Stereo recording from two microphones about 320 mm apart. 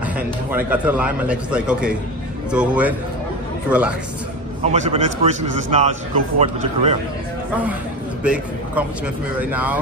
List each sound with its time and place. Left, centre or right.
0.5 s a man's voice: centre
4.6 s a man's voice: right
8.2 s a man's voice: centre